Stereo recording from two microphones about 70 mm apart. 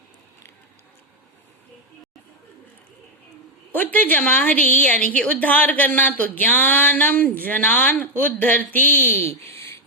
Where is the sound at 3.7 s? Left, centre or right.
Left.